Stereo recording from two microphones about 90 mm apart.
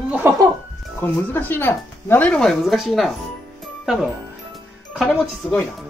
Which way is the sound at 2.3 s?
5° left (ahead or behind).